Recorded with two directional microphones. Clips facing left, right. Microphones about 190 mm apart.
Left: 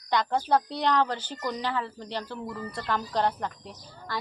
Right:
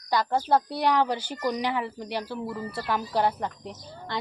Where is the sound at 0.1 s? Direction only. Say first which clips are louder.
Right 1 dB; 5° right (ahead or behind).